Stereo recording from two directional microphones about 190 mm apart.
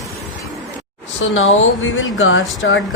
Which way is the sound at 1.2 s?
90° left.